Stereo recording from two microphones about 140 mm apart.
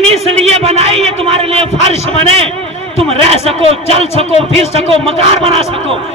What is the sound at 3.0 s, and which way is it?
Speech, 45° right (ahead or behind).